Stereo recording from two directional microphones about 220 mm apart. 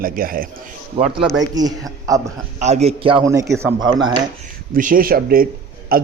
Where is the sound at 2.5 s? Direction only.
30° right (ahead or behind); by 3.8 s 10° right (ahead or behind).